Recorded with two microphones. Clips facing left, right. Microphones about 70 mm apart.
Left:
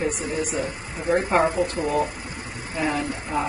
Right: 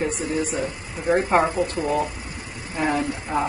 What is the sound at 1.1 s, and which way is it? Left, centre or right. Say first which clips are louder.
Speech: right 1 dB; right.